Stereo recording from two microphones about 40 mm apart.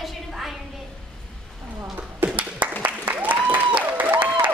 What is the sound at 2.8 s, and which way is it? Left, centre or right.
Applause, right.